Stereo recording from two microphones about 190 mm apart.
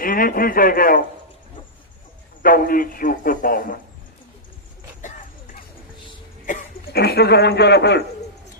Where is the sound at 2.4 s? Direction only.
50° left (ahead or behind).